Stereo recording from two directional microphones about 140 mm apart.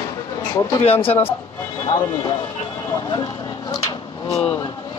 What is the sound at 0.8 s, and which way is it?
Speech, 45° left (ahead or behind).